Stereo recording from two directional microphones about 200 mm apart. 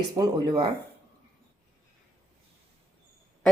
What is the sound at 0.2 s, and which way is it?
Speech, 20° right (ahead or behind).